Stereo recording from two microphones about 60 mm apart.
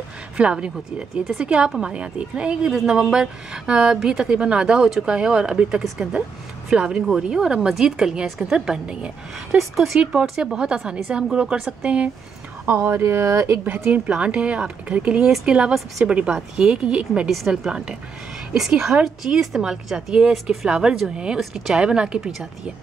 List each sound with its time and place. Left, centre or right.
0.4 s speech: centre
2.7 s speech: centre
9.6 s speech: centre
10.3 s speech: centre
12.7 s speech: right
13.8 s speech: right
21.4 s speech: centre